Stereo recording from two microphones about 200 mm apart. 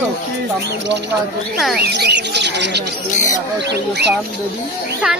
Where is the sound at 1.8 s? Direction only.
55° right (ahead or behind).